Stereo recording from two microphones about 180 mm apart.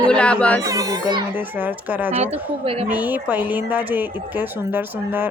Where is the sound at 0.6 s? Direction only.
20° right (ahead or behind).